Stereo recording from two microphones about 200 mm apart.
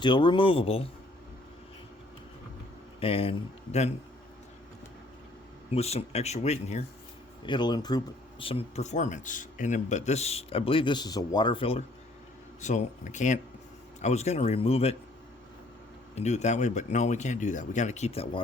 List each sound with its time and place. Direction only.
0.0 s speech: 25° left (ahead or behind)
3.0 s speech: 30° left (ahead or behind)
5.7 s speech: 30° left (ahead or behind)
7.4 s speech: 25° left (ahead or behind)
16.1 s speech: 35° left (ahead or behind)